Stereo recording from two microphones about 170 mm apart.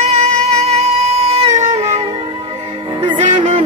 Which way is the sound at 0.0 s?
40° right (ahead or behind).